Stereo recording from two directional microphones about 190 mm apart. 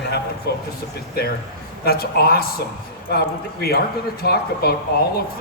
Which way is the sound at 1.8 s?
55° left (ahead or behind).